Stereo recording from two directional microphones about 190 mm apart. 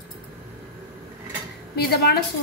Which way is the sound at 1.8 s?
55° left (ahead or behind).